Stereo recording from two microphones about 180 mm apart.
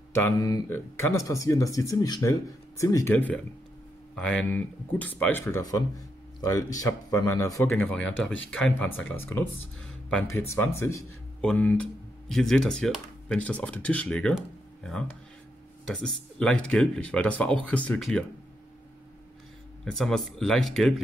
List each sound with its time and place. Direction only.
0.1 s speech: 15° left (ahead or behind)
7.7 s speech: 5° left (ahead or behind)
10.5 s speech: 15° left (ahead or behind)
14.3 s a sound: 5° left (ahead or behind)
15.9 s speech: 5° left (ahead or behind)
19.8 s speech: centre (ahead or behind)